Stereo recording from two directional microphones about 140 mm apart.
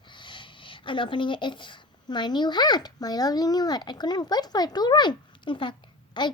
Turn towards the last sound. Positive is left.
turn(degrees=35)  # may be behind; listen again after turning